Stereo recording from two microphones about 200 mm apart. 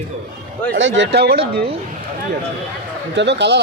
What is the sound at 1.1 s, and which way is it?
Speech, 55° right (ahead or behind).